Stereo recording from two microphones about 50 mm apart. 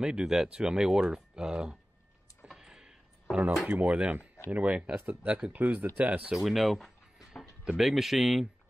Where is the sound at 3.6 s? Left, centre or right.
Right.